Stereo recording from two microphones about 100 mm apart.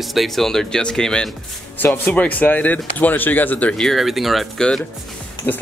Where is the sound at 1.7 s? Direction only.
20° left (ahead or behind).